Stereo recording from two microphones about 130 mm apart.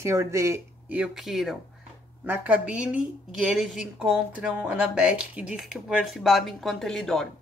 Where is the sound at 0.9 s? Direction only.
5° right (ahead or behind).